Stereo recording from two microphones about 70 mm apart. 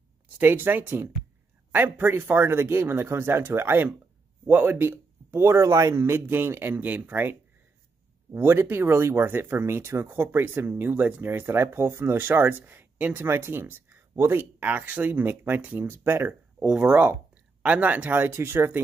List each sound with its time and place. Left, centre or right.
0.4 s speech: right
8.4 s speech: right
14.1 s speech: right
14.6 s speech: right
15.9 s speech: right
16.5 s speech: centre; by 18.7 s right